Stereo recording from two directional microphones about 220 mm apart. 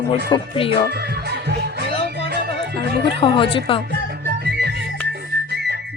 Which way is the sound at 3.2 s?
25° left (ahead or behind).